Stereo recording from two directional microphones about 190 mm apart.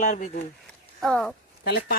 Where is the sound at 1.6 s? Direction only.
55° left (ahead or behind).